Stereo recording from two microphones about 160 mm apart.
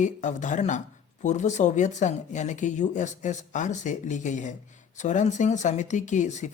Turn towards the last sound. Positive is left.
turn(degrees=50)  # may be behind; listen again after turning